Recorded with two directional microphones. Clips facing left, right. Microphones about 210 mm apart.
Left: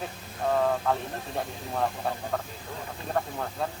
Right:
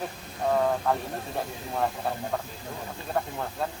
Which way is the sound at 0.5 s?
Centre (ahead or behind).